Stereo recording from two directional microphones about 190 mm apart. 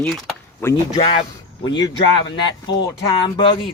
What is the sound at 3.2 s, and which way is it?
Speech, 25° left (ahead or behind).